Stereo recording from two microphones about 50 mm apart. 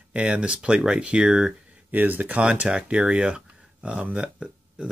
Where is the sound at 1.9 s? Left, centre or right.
Right.